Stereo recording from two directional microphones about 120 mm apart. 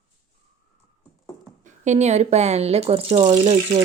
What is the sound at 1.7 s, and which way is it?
Speech, 75° right (ahead or behind).